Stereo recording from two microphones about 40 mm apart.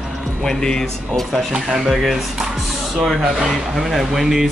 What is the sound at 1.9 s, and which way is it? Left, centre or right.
Speech, centre.